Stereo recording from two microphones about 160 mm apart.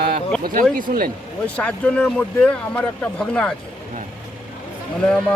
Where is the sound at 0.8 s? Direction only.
60° right (ahead or behind).